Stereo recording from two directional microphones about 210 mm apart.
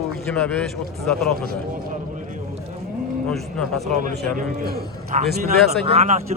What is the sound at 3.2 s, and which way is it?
Speech, centre (ahead or behind).